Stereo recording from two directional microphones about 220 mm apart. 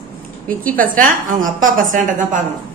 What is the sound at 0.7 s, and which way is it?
A woman's voice, 40° right (ahead or behind).